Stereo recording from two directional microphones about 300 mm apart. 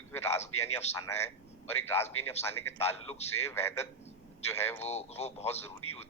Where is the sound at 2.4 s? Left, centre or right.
Left.